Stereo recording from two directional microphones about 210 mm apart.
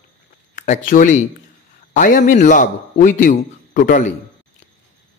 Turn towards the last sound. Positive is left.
turn(degrees=40)  # may be behind; listen again after turning